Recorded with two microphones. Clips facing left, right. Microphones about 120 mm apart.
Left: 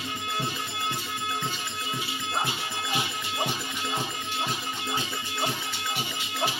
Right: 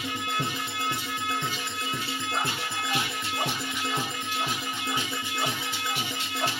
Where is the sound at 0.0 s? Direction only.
25° left (ahead or behind).